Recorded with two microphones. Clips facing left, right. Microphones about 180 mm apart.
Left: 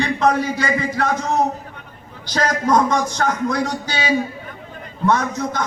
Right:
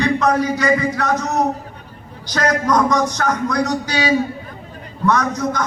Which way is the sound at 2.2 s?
25° left (ahead or behind).